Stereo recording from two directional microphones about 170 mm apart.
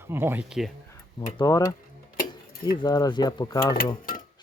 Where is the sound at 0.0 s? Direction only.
15° right (ahead or behind).